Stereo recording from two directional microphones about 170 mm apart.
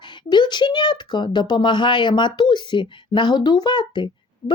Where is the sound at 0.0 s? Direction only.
25° left (ahead or behind).